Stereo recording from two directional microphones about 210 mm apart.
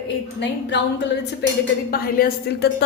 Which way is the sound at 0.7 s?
55° left (ahead or behind).